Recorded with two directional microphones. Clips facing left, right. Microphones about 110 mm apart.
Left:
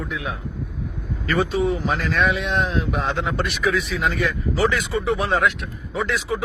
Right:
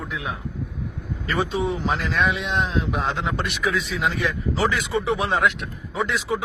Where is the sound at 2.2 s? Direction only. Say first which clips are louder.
Left 2 dB; 25° right (ahead or behind).